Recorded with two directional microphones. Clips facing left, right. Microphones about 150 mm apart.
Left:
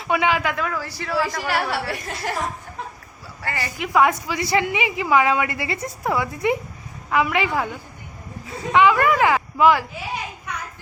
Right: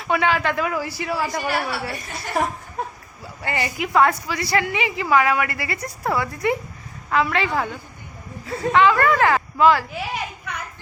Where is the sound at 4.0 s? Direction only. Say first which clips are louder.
Even; 15° left (ahead or behind).